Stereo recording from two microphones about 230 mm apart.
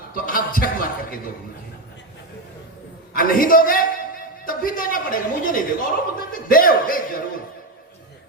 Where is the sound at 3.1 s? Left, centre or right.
Left.